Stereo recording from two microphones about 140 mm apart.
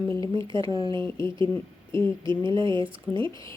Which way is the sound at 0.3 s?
35° right (ahead or behind).